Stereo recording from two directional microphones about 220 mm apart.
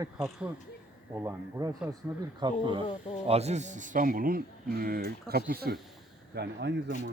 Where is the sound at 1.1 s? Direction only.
10° right (ahead or behind).